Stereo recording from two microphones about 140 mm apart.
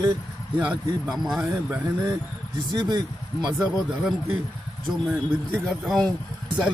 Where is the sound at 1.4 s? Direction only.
20° right (ahead or behind).